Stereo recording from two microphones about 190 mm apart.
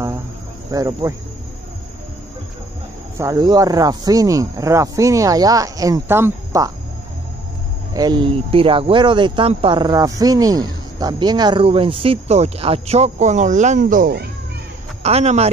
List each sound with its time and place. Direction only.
0.7 s speech: 15° right (ahead or behind)
3.2 s speech: 20° right (ahead or behind)
7.9 s speech: 20° right (ahead or behind); by 14.2 s 45° right (ahead or behind)
15.0 s speech: 35° right (ahead or behind)